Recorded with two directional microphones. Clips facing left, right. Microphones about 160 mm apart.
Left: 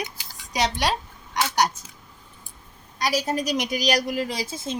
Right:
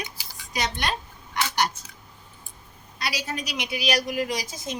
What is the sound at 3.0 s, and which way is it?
A woman's voice, 45° left (ahead or behind).